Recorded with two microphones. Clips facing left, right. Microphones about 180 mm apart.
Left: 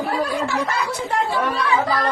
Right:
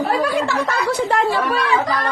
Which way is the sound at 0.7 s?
85° right.